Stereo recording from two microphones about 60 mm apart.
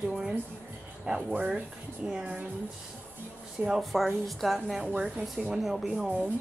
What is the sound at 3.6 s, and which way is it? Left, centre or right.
A woman's voice, centre.